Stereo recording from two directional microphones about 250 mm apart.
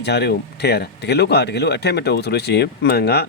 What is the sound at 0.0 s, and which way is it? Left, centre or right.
Speech, left.